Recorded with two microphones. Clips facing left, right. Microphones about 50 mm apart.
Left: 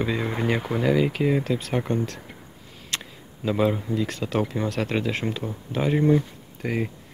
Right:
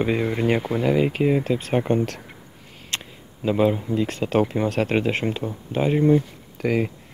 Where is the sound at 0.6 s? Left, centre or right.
Centre.